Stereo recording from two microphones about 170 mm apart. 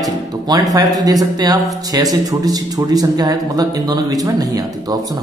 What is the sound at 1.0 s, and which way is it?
Speech, 20° right (ahead or behind).